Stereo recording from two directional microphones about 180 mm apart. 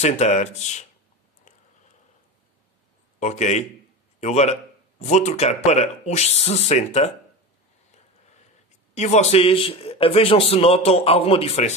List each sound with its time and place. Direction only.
0.0 s speech: 40° left (ahead or behind)
3.2 s speech: 40° left (ahead or behind)
8.9 s speech: 40° left (ahead or behind)